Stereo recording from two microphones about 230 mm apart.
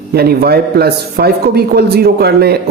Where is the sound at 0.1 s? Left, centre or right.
Right.